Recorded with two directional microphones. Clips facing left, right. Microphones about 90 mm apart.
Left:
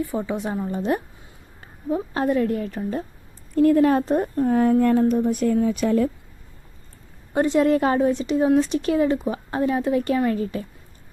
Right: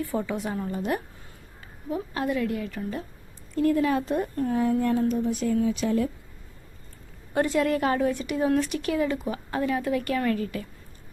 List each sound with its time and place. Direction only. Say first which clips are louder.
0.0 s a woman's voice: left 3 dB; 20° left (ahead or behind); by 4.4 s 35° left (ahead or behind)
4.4 s speech: left 7 dB; 50° left (ahead or behind)
7.3 s a woman's voice: left 5 dB; 25° left (ahead or behind)